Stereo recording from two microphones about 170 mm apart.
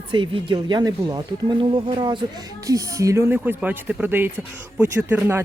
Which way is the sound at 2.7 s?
20° right (ahead or behind).